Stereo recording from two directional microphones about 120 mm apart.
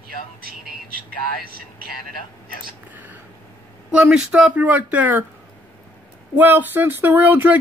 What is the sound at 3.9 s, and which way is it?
Speech, 5° right (ahead or behind).